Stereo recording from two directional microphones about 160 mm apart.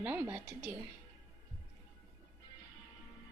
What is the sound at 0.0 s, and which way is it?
Speech, 10° right (ahead or behind).